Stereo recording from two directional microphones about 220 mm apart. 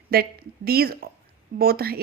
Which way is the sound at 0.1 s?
45° right (ahead or behind).